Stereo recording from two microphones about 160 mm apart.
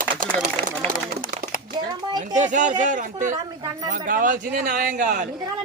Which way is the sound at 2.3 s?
50° right (ahead or behind).